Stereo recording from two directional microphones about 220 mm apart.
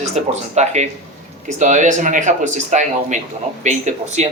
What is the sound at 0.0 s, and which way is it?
Speech, 30° right (ahead or behind).